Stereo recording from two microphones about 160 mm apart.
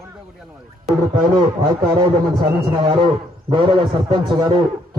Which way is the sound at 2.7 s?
30° right (ahead or behind).